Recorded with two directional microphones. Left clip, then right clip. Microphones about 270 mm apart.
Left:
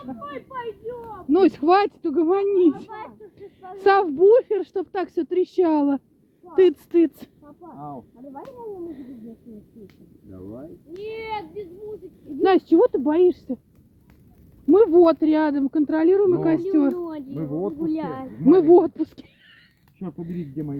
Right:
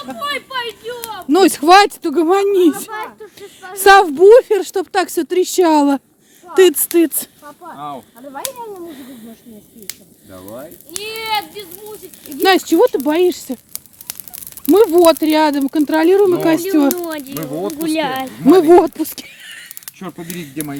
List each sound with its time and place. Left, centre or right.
0.1 s a sound: right
1.3 s speech: centre
7.6 s whip: right
10.3 s speech: right
12.4 s speech: centre
14.7 s speech: centre
16.9 s speech: right
18.4 s speech: centre